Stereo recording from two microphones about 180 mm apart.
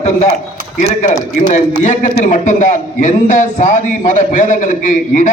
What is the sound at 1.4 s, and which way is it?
A man's voice, 45° left (ahead or behind).